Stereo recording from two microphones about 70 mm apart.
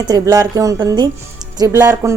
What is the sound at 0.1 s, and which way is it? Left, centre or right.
Speech, right.